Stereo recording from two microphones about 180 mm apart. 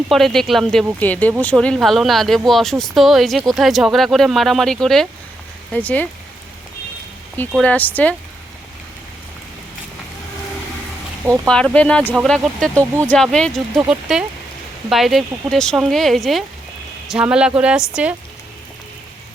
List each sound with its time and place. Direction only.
0.1 s speech: centre (ahead or behind)
7.3 s speech: 5° left (ahead or behind)
11.4 s speech: 5° left (ahead or behind)